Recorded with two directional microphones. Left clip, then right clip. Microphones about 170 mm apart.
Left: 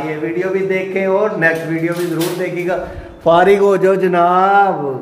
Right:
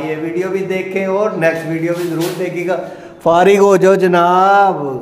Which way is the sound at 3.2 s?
50° right (ahead or behind).